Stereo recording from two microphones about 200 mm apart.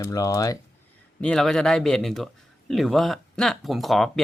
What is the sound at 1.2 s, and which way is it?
Speech, 5° left (ahead or behind).